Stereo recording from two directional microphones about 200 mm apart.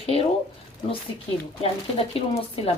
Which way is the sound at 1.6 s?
30° left (ahead or behind).